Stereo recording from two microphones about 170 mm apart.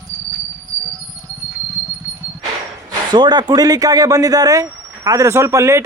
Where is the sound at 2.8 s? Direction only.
25° right (ahead or behind).